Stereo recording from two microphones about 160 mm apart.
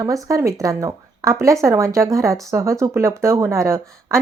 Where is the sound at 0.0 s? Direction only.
20° right (ahead or behind).